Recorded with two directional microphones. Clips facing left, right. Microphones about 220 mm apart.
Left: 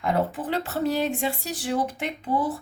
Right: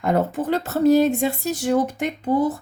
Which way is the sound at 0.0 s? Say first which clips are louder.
Right 4 dB; 45° right (ahead or behind).